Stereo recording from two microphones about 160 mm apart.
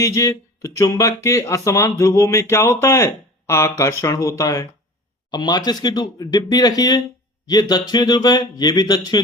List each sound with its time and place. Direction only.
0.0 s speech: 20° left (ahead or behind)